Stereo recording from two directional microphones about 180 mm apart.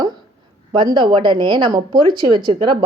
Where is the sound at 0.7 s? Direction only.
25° right (ahead or behind).